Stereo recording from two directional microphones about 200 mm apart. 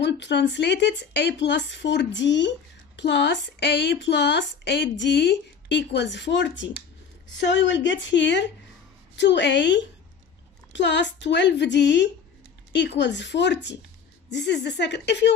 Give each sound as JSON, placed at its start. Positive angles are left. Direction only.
{"t": 0.0, "sound": "speech", "side_deg": 60}